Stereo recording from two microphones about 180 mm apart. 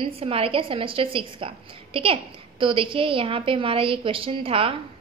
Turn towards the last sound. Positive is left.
turn(degrees=-30)  # may be behind; listen again after turning